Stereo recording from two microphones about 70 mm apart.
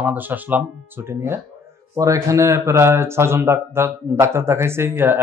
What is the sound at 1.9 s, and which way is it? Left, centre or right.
Speech, right.